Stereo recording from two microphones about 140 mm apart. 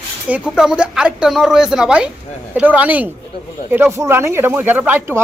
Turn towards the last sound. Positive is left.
turn(degrees=-15)  # may be behind; listen again after turning